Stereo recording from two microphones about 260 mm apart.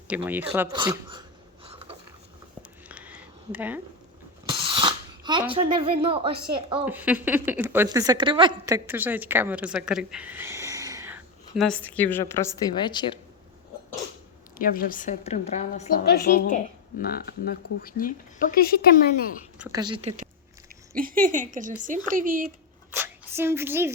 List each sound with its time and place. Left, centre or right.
0.1 s speech: centre
1.6 s a sound: right
2.6 s a sound: centre
4.6 s sneeze: centre
5.5 s speech: right
6.8 s speech: centre
14.6 s speech: left
19.5 s speech: centre; by 22.4 s right
22.9 s a woman's voice: centre